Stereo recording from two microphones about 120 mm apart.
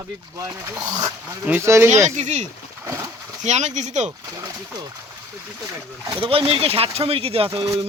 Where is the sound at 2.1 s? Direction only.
80° right.